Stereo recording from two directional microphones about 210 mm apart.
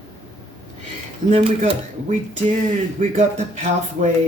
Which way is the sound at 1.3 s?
30° right (ahead or behind).